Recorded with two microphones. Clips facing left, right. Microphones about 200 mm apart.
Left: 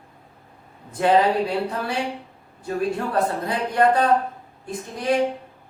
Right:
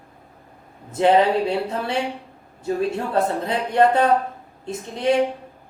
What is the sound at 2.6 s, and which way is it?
Speech, 25° right (ahead or behind).